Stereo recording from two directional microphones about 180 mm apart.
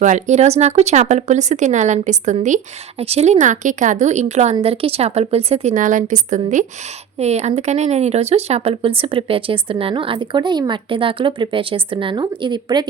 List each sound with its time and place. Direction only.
0.0 s speech: 40° right (ahead or behind); by 12.8 s 25° right (ahead or behind)